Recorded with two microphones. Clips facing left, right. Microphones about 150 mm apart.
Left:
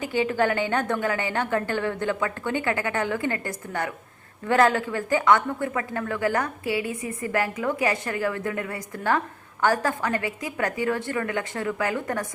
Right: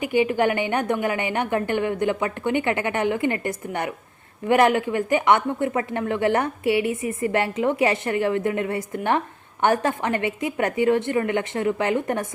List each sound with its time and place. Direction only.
0.0 s a woman's voice: 15° right (ahead or behind)